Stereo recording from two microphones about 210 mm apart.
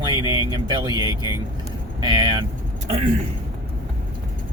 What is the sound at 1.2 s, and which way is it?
Speech, 20° left (ahead or behind).